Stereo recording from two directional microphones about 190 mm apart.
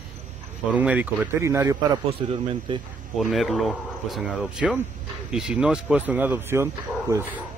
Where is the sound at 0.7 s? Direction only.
10° right (ahead or behind).